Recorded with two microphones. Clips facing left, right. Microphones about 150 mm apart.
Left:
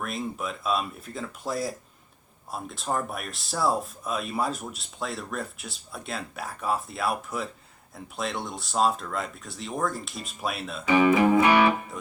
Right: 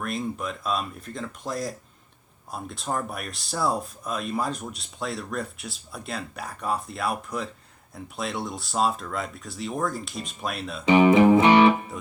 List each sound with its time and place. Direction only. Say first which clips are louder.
0.0 s speech: right 2 dB; centre (ahead or behind)
10.8 s music: right 4 dB; 25° right (ahead or behind)